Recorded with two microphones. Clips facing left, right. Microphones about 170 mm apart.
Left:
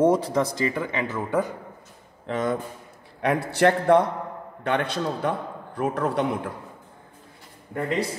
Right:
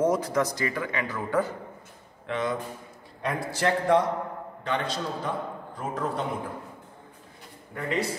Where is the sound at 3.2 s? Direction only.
65° left (ahead or behind).